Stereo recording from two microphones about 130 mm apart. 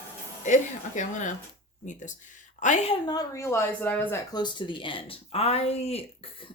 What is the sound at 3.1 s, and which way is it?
A woman's voice, 25° left (ahead or behind).